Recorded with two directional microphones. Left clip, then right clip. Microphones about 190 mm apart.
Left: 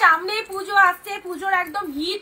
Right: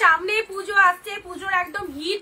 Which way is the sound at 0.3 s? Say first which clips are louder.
Even; 20° right (ahead or behind).